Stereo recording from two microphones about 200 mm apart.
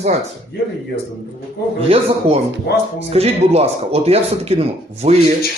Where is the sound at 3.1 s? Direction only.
30° right (ahead or behind).